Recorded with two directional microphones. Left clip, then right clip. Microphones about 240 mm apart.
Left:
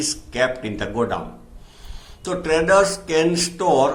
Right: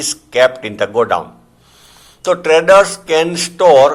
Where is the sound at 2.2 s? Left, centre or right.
Right.